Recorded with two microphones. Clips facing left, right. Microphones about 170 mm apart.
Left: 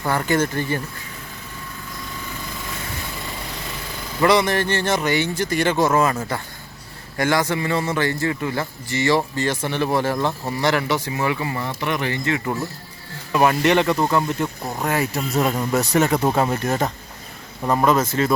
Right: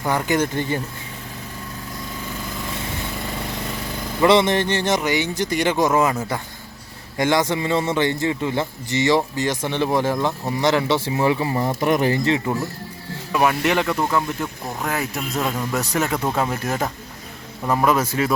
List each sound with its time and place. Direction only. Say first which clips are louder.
0.0 s a man's voice: even; 10° right (ahead or behind)
4.2 s a man's voice: right 2 dB; 25° right (ahead or behind)
7.2 s a man's voice: right 1 dB; 20° right (ahead or behind)
10.2 s a man's voice: even; 5° right (ahead or behind)
10.6 s a man's voice: right 2 dB; 20° right (ahead or behind)
11.8 s speech: right 6 dB; 40° right (ahead or behind)
13.3 s speech: left 2 dB; centre (ahead or behind)
16.1 s speech: left 4 dB; 20° left (ahead or behind)
16.4 s a man's voice: left 2 dB; 5° right (ahead or behind)